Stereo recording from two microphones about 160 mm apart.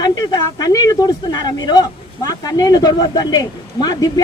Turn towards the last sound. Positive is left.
turn(degrees=25)  # may be behind; listen again after turning